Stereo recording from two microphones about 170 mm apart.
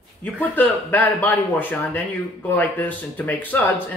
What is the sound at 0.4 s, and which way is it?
Speech, 10° left (ahead or behind).